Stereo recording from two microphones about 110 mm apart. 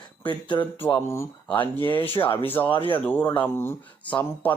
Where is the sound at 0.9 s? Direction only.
25° left (ahead or behind).